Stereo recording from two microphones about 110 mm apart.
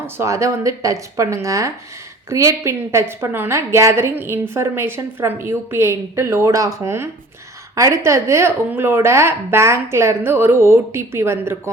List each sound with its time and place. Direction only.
0.2 s a woman's voice: 25° right (ahead or behind)